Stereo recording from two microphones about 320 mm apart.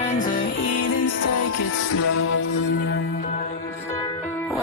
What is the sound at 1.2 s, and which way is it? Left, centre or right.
Music, left.